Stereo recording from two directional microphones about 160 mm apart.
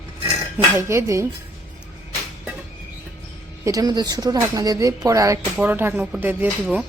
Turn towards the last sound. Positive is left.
turn(degrees=-10)  # may be behind; listen again after turning